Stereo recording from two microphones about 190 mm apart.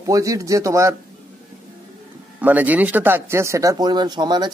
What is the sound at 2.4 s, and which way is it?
Speech, 10° right (ahead or behind).